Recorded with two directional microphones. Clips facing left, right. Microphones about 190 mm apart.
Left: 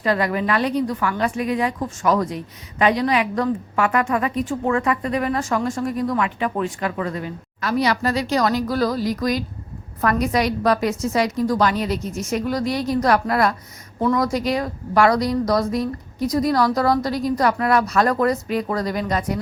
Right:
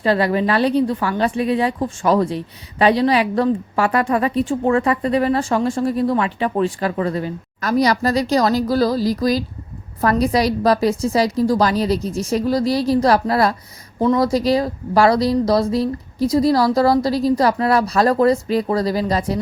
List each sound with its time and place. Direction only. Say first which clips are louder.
0.0 s speech: right 4 dB; 30° right (ahead or behind)